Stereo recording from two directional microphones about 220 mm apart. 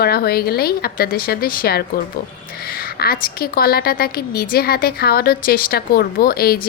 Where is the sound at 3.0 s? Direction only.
45° left (ahead or behind).